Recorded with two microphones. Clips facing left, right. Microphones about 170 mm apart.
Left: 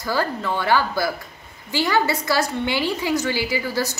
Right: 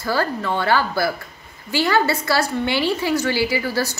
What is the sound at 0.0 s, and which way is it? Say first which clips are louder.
A woman's voice: right 2 dB; 15° left (ahead or behind).